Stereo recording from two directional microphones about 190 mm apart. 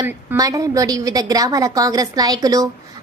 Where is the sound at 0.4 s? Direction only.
20° right (ahead or behind).